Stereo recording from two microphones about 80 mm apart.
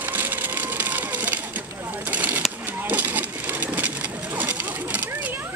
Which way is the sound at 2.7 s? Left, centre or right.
Right.